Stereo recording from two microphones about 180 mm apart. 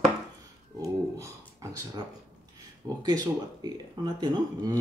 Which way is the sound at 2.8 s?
20° right (ahead or behind).